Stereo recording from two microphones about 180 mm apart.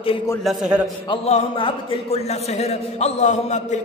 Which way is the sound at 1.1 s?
35° left (ahead or behind).